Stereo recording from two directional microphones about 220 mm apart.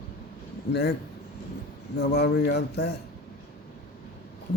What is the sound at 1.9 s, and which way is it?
Speech, 50° left (ahead or behind).